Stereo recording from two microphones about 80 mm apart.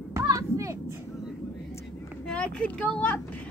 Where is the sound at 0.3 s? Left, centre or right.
Right.